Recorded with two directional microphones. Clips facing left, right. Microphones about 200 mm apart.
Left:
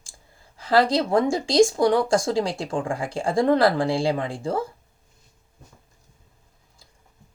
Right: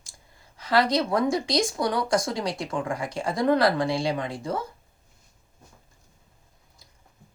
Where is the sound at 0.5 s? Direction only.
30° left (ahead or behind).